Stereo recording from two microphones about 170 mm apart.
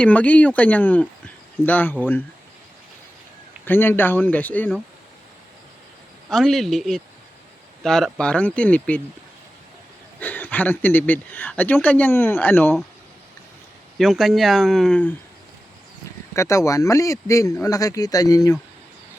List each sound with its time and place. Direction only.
0.0 s speech: 10° left (ahead or behind)
3.7 s speech: 15° left (ahead or behind)
6.3 s speech: centre (ahead or behind)
10.2 s speech: 10° left (ahead or behind)
14.0 s speech: centre (ahead or behind)
16.3 s speech: 15° left (ahead or behind)